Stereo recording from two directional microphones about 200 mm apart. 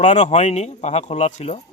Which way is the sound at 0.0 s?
35° left (ahead or behind).